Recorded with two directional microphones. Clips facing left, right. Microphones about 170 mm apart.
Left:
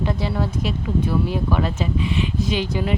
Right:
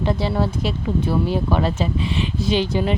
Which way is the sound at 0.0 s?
30° right (ahead or behind).